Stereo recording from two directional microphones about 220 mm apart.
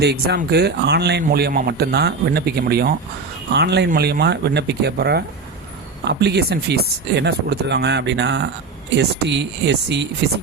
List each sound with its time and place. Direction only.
0.0 s speech: 50° right (ahead or behind)